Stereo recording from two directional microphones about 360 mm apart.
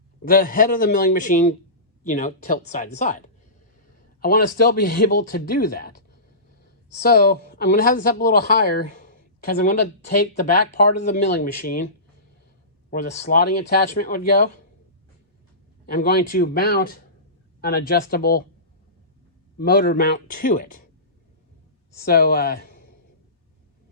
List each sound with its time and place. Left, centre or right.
0.3 s speech: left
7.1 s speech: left
12.9 s speech: left
15.9 s speech: left
19.5 s speech: left
22.0 s speech: left